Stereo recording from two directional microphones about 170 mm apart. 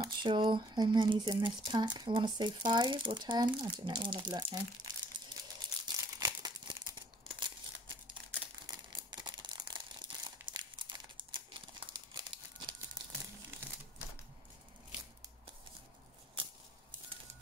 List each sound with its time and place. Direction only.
0.0 s speech: 25° right (ahead or behind)
5.9 s crumpling: 20° right (ahead or behind)
8.6 s crumpling: 25° right (ahead or behind)